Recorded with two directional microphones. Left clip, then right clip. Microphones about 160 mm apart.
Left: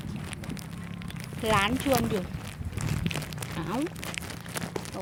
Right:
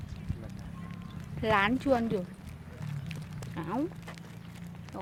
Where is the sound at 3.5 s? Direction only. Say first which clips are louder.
Left 2 dB; 20° right (ahead or behind).